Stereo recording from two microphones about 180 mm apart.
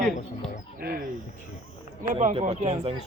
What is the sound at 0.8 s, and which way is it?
Speech, 55° right (ahead or behind).